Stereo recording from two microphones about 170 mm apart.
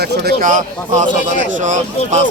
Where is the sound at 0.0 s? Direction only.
65° right (ahead or behind).